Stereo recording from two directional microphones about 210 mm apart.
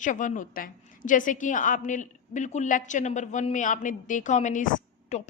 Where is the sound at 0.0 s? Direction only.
35° left (ahead or behind).